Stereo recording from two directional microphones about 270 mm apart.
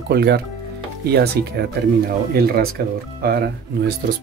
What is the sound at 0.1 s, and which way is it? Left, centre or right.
Speech, right.